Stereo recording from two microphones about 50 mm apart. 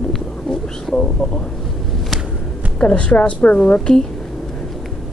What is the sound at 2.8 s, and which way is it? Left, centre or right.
A woman's voice, left.